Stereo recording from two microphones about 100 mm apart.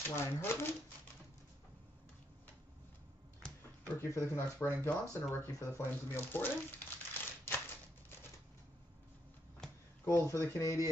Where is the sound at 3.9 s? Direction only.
30° left (ahead or behind).